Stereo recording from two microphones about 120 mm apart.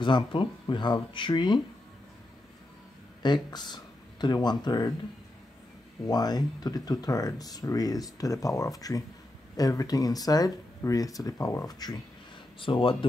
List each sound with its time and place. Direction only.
0.0 s speech: 40° left (ahead or behind)
3.4 s speech: 35° left (ahead or behind)
6.0 s speech: 35° left (ahead or behind)
12.5 s speech: 45° left (ahead or behind)